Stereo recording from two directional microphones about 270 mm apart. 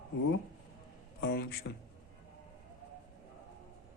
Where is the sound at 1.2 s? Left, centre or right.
Left.